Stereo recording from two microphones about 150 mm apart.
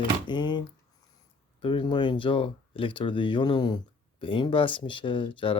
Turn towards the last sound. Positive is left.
turn(degrees=35)  # may be behind; listen again after turning